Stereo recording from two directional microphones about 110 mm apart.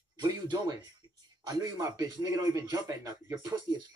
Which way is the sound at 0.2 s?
40° right (ahead or behind).